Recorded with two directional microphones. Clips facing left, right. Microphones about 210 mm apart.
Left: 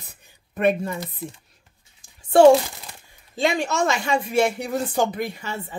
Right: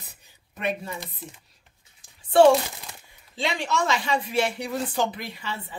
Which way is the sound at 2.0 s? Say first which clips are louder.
Left 3 dB; 45° left (ahead or behind).